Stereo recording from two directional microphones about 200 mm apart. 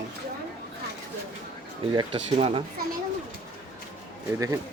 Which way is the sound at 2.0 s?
25° right (ahead or behind).